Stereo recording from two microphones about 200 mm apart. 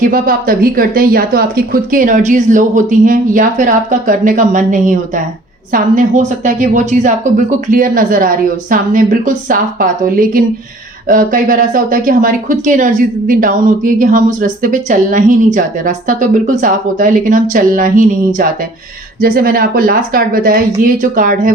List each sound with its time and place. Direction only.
0.0 s speech: 45° right (ahead or behind)
19.2 s speech: 45° right (ahead or behind)